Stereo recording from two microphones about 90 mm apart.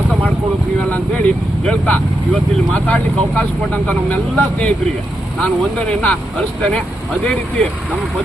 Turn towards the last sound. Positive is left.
turn(degrees=15)  # may be behind; listen again after turning